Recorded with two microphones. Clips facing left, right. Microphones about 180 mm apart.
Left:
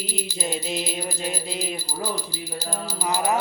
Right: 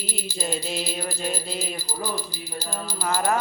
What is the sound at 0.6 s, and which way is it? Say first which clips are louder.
Speech: left 1 dB; 15° left (ahead or behind).